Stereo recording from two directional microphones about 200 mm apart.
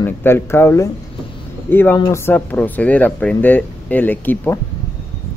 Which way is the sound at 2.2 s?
10° left (ahead or behind).